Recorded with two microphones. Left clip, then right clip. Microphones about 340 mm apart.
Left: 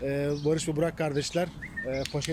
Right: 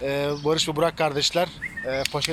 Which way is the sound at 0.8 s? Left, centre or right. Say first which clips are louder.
Right 7 dB; centre.